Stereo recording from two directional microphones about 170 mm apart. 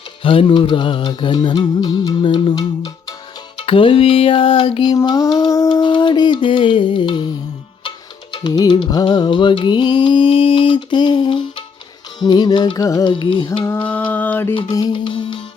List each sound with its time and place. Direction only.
0.2 s music: 30° left (ahead or behind)
3.6 s music: 30° left (ahead or behind)
13.7 s mantra: 10° left (ahead or behind)
14.7 s music: 25° left (ahead or behind)